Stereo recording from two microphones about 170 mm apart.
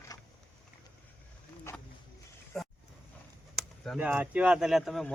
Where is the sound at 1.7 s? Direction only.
15° left (ahead or behind).